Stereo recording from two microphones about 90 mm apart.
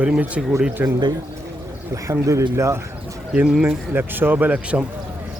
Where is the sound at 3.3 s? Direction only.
10° right (ahead or behind).